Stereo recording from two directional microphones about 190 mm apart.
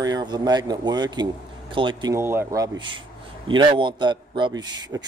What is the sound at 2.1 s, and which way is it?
Speech, 15° right (ahead or behind).